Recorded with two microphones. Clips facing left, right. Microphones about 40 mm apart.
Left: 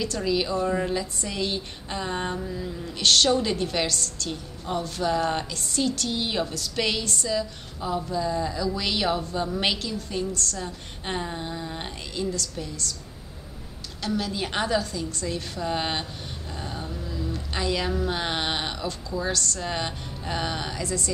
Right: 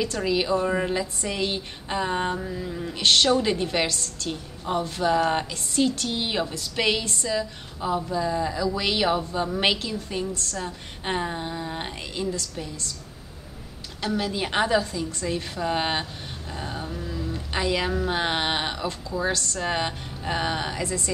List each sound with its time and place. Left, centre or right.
0.0 s a woman's voice: centre
14.0 s a woman's voice: centre